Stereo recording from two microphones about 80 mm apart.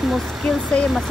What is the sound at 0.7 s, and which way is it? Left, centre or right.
Speech, centre.